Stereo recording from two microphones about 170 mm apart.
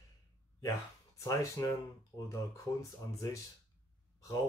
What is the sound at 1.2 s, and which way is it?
Speech, 20° left (ahead or behind).